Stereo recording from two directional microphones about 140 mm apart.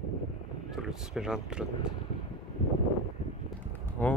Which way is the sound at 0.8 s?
5° right (ahead or behind).